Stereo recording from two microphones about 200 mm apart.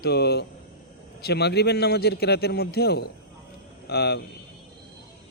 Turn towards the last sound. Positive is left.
turn(degrees=55)  # may be behind; listen again after turning